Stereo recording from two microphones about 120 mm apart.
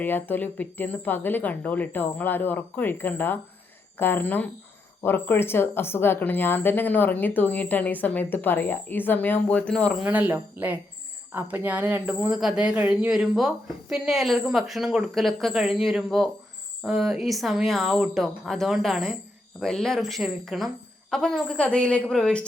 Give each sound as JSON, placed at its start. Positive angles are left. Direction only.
{"t": 0.0, "sound": "a woman's voice", "side_deg": 15}
{"t": 10.1, "sound": "speech", "side_deg": -15}
{"t": 12.3, "sound": "speech", "side_deg": -5}